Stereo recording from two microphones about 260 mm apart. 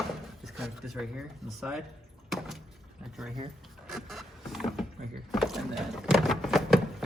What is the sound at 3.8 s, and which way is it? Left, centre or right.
Boat, centre.